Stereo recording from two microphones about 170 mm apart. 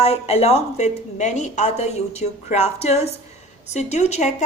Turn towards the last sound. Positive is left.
turn(degrees=40)  # may be behind; listen again after turning